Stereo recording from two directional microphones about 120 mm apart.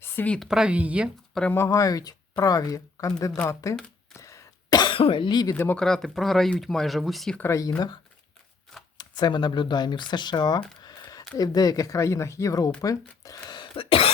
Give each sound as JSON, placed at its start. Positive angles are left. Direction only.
{"t": 0.0, "sound": "a sound", "side_deg": 15}
{"t": 0.3, "sound": "speech", "side_deg": -5}
{"t": 1.3, "sound": "speech", "side_deg": 5}
{"t": 1.5, "sound": "speech", "side_deg": 25}
{"t": 4.1, "sound": "throat clearing", "side_deg": 25}
{"t": 5.5, "sound": "speech", "side_deg": 10}
{"t": 7.3, "sound": "speech", "side_deg": 25}
{"t": 9.0, "sound": "speech", "side_deg": 35}
{"t": 10.8, "sound": "a sound", "side_deg": 35}
{"t": 11.3, "sound": "speech", "side_deg": 30}